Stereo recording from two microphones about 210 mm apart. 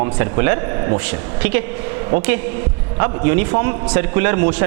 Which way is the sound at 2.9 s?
15° right (ahead or behind).